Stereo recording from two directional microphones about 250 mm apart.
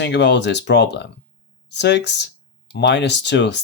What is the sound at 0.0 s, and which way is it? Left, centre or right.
Speech, left.